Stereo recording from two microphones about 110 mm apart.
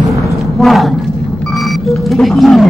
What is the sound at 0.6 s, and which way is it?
Thump, centre (ahead or behind).